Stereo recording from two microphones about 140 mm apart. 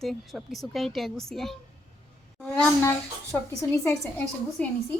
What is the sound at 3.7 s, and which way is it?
Speech, 25° left (ahead or behind).